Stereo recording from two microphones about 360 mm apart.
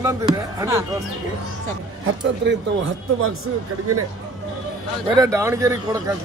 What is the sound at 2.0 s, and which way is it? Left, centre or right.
Speech, right.